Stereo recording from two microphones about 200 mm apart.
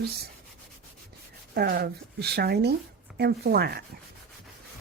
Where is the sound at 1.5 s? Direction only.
50° right (ahead or behind).